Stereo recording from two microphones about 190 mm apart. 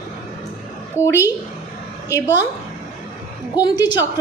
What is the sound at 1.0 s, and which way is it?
Speech, 15° left (ahead or behind).